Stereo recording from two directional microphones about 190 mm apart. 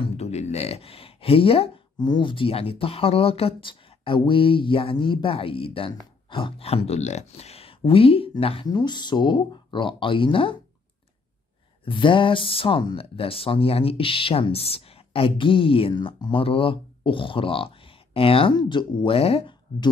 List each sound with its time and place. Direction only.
0.0 s speech: 35° left (ahead or behind)
11.8 s speech: 25° left (ahead or behind)